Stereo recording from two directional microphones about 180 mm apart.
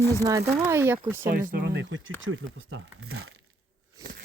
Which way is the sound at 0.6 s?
15° right (ahead or behind).